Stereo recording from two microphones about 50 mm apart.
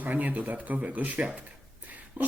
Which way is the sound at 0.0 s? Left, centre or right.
Right.